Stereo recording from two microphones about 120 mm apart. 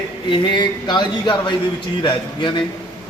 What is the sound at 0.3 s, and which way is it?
Speech, 40° left (ahead or behind).